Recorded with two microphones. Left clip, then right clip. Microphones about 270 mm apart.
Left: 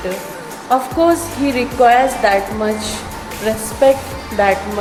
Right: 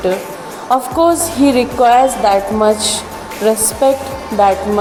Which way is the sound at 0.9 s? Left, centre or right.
Right.